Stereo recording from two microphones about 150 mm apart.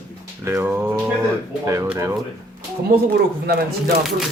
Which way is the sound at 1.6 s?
20° right (ahead or behind).